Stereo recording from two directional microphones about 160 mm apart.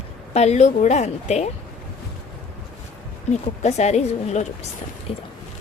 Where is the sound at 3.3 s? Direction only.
45° left (ahead or behind).